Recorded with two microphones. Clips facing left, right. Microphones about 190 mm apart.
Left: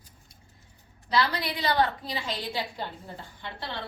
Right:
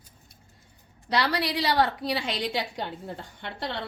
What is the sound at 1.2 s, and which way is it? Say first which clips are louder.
A woman's voice: right 2 dB; 75° right (ahead or behind).